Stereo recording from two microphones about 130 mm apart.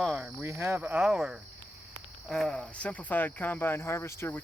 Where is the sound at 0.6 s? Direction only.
15° right (ahead or behind).